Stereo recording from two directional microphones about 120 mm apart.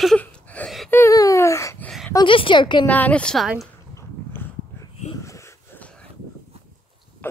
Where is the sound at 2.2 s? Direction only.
45° left (ahead or behind).